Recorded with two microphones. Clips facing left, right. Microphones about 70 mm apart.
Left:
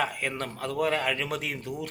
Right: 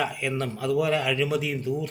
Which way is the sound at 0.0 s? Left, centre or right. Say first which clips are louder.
Right 2 dB; left.